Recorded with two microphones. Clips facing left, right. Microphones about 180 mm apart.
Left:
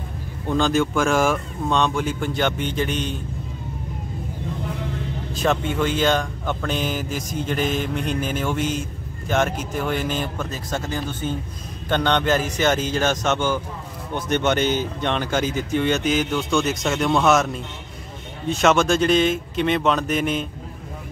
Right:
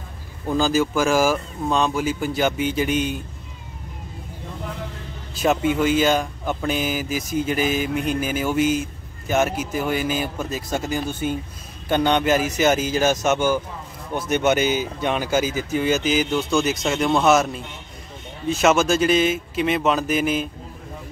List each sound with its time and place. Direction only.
0.5 s speech: 5° right (ahead or behind)
5.3 s speech: 5° right (ahead or behind)